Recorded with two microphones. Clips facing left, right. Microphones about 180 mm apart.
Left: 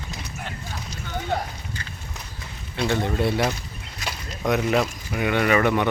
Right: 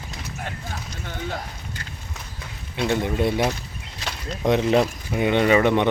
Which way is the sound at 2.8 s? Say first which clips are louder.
Right 1 dB; 15° right (ahead or behind).